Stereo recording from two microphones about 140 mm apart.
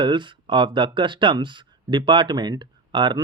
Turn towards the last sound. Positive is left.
turn(degrees=-30)  # may be behind; listen again after turning